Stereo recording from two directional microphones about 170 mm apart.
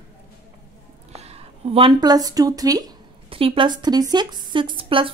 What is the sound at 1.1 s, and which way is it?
A woman's voice, 35° right (ahead or behind).